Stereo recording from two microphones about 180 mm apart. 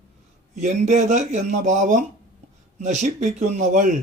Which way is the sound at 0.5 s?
40° right (ahead or behind).